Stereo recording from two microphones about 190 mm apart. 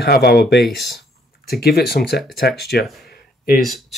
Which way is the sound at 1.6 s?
55° left (ahead or behind).